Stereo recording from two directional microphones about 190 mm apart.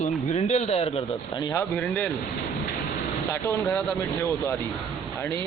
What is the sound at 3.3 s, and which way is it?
Speech, 5° left (ahead or behind).